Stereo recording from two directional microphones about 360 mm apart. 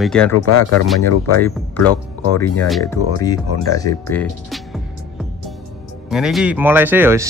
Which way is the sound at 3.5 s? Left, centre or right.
Left.